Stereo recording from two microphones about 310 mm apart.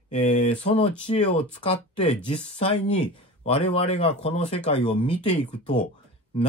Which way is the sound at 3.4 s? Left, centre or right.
Centre.